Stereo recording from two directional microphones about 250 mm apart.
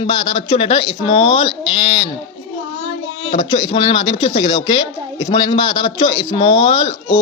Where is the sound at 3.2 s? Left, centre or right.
Left.